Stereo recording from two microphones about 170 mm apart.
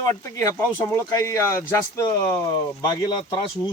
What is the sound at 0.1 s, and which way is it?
Speech, 15° left (ahead or behind).